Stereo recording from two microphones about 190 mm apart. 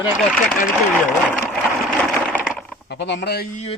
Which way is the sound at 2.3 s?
10° right (ahead or behind).